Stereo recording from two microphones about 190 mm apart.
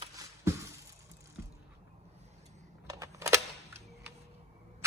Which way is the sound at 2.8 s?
15° right (ahead or behind).